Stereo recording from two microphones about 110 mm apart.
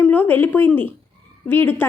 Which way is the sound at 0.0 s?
15° left (ahead or behind).